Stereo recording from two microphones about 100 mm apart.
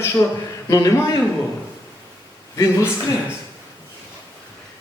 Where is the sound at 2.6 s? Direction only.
30° left (ahead or behind).